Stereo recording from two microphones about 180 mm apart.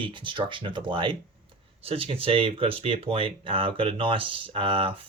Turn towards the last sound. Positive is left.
turn(degrees=-30)  # may be behind; listen again after turning